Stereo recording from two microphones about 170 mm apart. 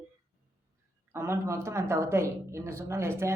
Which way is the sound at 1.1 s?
15° right (ahead or behind).